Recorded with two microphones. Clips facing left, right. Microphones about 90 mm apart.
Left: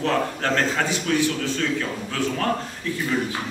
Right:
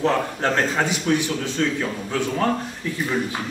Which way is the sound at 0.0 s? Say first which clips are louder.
Right 2 dB; 20° right (ahead or behind).